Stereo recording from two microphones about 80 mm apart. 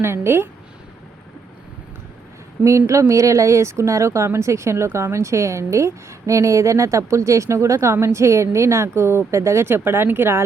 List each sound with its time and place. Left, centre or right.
0.0 s speech: right
2.6 s speech: right